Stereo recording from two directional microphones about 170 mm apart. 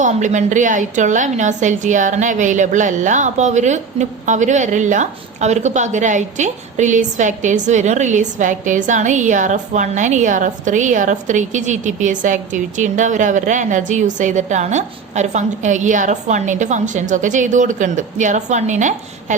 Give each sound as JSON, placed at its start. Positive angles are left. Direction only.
{"t": 0.0, "sound": "a woman's voice", "side_deg": -45}